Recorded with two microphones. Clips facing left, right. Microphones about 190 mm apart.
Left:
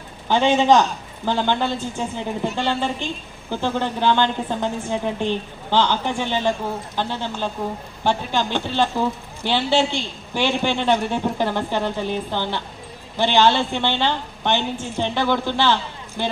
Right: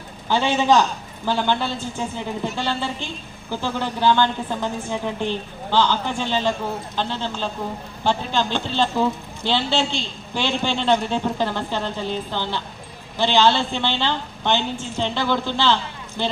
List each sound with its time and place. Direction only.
0.3 s speech: 20° left (ahead or behind)